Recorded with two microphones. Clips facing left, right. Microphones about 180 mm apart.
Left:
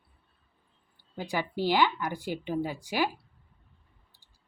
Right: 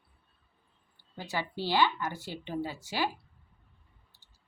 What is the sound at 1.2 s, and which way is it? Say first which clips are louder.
Speech: left 4 dB; 15° left (ahead or behind).